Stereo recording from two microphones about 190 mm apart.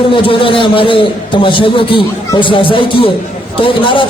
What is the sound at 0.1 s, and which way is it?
A man's voice, 25° left (ahead or behind).